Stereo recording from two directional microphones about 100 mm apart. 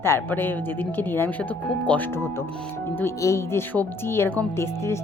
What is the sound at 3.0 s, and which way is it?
Speech, 30° left (ahead or behind).